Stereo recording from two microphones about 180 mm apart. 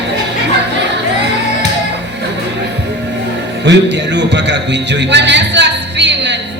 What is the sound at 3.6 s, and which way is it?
Music, 75° right (ahead or behind).